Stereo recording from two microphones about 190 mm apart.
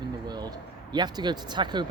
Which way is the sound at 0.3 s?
20° right (ahead or behind).